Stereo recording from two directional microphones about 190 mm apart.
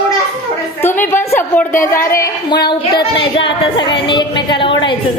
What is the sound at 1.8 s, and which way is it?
A woman's voice, 15° left (ahead or behind).